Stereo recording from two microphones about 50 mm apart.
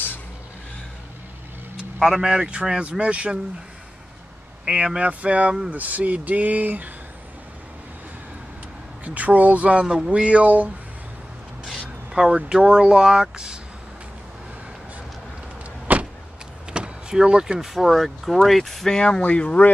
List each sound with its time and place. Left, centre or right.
2.0 s speech: centre
2.2 s speech: centre
4.6 s speech: right
9.0 s speech: right
9.8 s speech: centre; by 10.7 s right
11.6 s speech: centre
15.9 s vehicle: right
16.8 s vehicle: right
17.1 s speech: centre
17.7 s speech: centre
18.9 s speech: centre